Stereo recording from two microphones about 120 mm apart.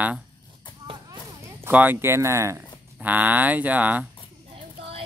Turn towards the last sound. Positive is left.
turn(degrees=-15)  # may be behind; listen again after turning